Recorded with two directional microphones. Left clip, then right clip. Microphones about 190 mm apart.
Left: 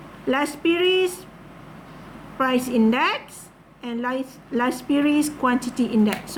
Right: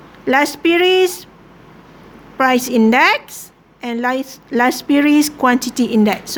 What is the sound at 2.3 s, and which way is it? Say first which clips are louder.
Speech: right 7 dB; 55° right (ahead or behind).